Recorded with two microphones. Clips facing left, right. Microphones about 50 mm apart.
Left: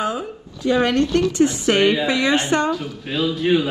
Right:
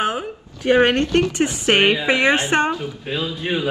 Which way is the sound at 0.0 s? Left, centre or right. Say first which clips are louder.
Right 1 dB; right.